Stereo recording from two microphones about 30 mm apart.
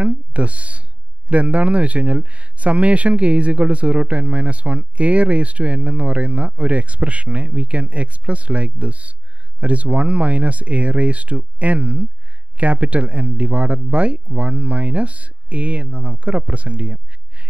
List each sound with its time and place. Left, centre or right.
0.0 s speech: right